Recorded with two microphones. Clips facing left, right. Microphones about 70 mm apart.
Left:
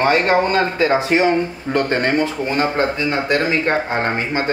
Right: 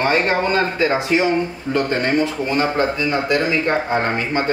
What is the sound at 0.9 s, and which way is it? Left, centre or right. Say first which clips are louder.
Speech: left 2 dB; left.